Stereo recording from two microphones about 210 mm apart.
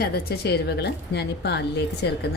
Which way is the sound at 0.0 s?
45° left (ahead or behind).